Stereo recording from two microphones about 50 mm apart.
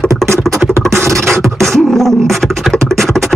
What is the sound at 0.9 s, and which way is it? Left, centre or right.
Beatboxing, right.